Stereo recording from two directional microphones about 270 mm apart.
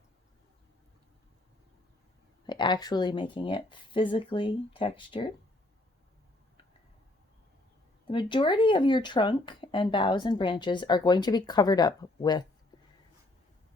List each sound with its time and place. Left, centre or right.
2.5 s speech: centre
8.1 s speech: centre